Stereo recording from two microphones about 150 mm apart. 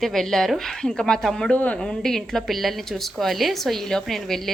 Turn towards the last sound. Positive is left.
turn(degrees=0)  # may be behind; listen again after turning